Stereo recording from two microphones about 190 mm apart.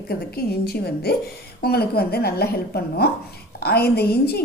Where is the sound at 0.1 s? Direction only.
55° left (ahead or behind).